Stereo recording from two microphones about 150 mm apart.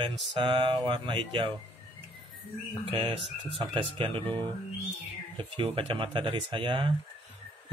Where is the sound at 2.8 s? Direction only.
35° right (ahead or behind).